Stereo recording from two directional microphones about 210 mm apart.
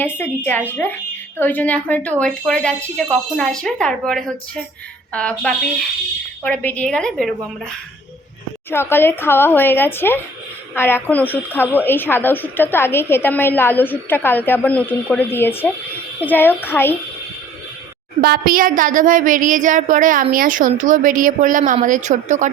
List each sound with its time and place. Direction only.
0.0 s speech: 10° left (ahead or behind)
8.7 s speech: 10° left (ahead or behind)
18.2 s speech: 45° right (ahead or behind)